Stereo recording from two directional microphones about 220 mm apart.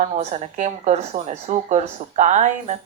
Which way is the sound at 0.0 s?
30° right (ahead or behind).